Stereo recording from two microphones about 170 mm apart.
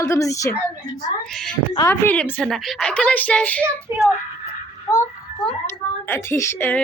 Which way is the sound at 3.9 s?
15° right (ahead or behind).